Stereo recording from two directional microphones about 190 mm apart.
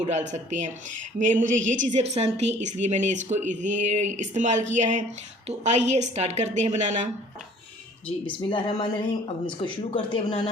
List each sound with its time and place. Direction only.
0.0 s a woman's voice: 35° right (ahead or behind)
8.3 s speech: 25° left (ahead or behind)